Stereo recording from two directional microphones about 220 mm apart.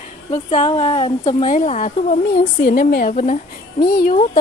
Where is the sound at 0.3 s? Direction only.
30° left (ahead or behind).